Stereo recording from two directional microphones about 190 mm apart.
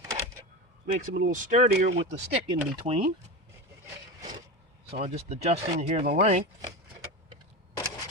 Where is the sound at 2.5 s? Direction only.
30° right (ahead or behind).